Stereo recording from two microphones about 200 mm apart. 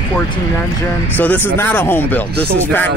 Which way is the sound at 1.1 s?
10° left (ahead or behind).